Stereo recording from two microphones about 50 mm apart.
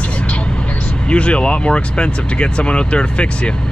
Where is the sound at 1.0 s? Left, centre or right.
Left.